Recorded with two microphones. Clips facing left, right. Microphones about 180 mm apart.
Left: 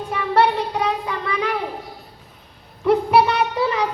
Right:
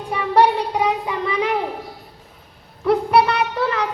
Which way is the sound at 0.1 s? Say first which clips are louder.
Right 2 dB; 15° right (ahead or behind).